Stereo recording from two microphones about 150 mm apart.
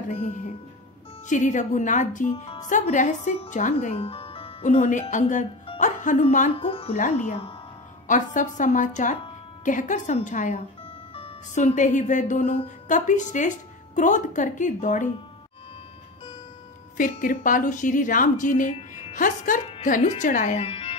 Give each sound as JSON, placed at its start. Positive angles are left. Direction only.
{"t": 0.1, "sound": "a woman's voice", "side_deg": 60}
{"t": 3.9, "sound": "music", "side_deg": 40}
{"t": 4.6, "sound": "a woman's voice", "side_deg": 55}
{"t": 6.7, "sound": "speech", "side_deg": 40}
{"t": 8.1, "sound": "a woman's voice", "side_deg": 60}
{"t": 16.9, "sound": "a woman's voice", "side_deg": 65}
{"t": 20.6, "sound": "music", "side_deg": 40}